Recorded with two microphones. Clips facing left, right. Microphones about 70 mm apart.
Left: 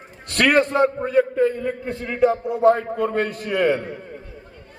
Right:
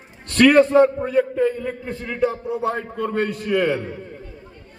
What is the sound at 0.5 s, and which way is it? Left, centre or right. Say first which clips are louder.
A man's voice: right 4 dB; centre.